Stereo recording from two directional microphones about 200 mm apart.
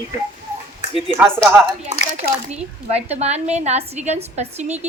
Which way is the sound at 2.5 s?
35° right (ahead or behind).